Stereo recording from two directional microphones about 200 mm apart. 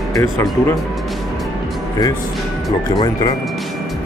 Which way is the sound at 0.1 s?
15° left (ahead or behind).